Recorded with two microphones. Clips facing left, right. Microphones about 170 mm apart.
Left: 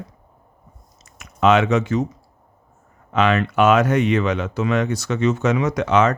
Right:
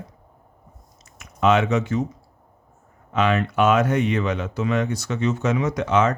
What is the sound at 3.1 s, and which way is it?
Speech, 90° left.